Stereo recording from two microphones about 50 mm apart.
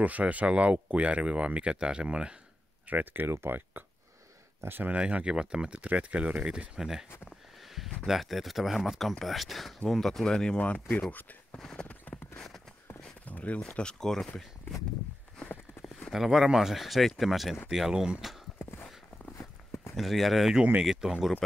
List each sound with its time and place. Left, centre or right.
0.0 s speech: right
2.9 s speech: right
3.3 s speech: right
4.9 s speech: right
8.1 s speech: centre
10.6 s speech: left
11.6 s speech: centre
13.3 s speech: left; by 14.4 s centre
16.1 s speech: centre
20.0 s speech: centre